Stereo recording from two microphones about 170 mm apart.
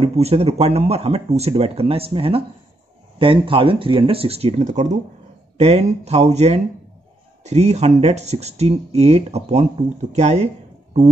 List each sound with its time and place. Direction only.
0.0 s speech: 35° right (ahead or behind)